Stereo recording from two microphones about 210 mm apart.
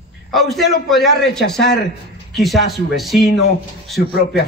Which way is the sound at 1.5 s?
50° left (ahead or behind).